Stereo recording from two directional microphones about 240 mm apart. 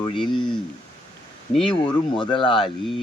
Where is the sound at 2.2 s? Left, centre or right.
Centre.